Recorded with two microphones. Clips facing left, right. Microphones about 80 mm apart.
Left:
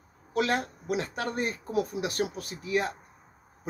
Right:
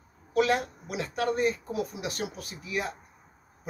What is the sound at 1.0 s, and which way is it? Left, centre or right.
Speech, left.